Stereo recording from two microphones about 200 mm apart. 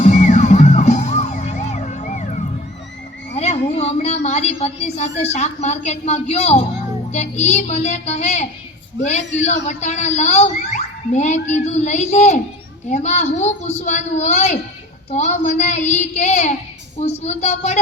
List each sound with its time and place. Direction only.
0.0 s music: 35° left (ahead or behind)
3.3 s a woman's voice: 35° left (ahead or behind)